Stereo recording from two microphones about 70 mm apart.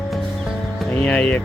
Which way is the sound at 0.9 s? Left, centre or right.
Centre.